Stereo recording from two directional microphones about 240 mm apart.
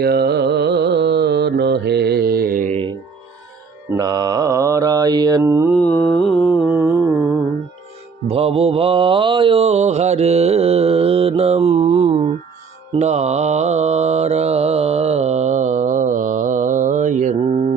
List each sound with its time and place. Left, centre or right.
0.0 s mantra: right
3.8 s mantra: centre
5.7 s mantra: centre
6.7 s mantra: centre
8.3 s mantra: right